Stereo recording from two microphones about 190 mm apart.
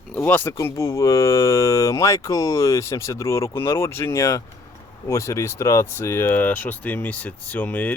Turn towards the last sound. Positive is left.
turn(degrees=10)  # may be behind; listen again after turning